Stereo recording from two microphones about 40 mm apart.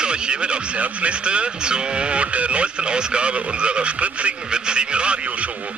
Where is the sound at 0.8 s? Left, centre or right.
Right.